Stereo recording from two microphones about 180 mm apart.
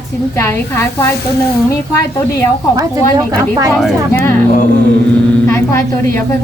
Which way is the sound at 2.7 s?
20° right (ahead or behind).